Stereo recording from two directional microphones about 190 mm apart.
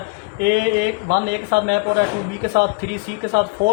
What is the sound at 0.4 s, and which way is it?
Speech, 60° right (ahead or behind).